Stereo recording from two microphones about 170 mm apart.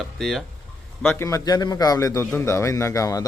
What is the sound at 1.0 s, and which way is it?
A man's voice, 15° left (ahead or behind).